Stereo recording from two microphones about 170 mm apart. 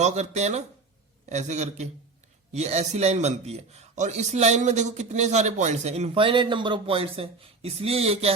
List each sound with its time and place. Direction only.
0.0 s a man's voice: 45° right (ahead or behind)